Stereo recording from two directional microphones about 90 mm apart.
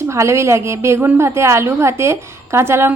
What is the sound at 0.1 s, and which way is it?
A woman's voice, 30° right (ahead or behind).